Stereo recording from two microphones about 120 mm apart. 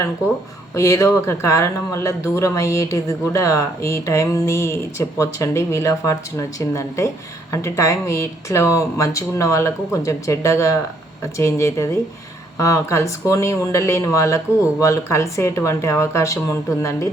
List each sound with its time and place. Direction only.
0.7 s speech: 25° left (ahead or behind)